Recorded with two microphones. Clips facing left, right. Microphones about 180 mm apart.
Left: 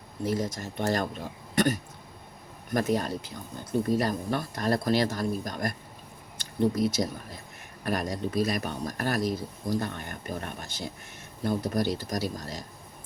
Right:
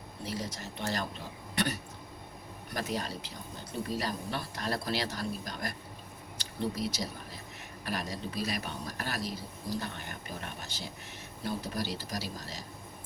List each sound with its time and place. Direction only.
0.3 s speech: 50° left (ahead or behind)